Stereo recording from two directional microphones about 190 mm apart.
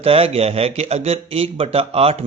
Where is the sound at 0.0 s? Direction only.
30° right (ahead or behind).